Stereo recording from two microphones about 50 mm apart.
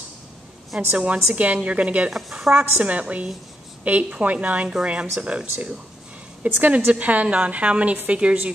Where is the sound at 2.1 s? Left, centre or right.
Centre.